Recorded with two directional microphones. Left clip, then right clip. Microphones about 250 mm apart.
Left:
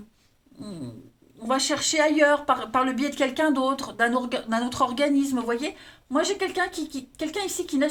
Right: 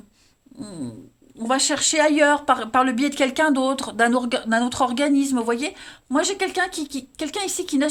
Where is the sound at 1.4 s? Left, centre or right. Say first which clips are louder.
Right 3 dB; right.